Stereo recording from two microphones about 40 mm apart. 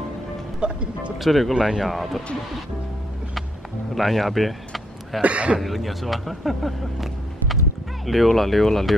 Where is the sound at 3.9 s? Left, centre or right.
Centre.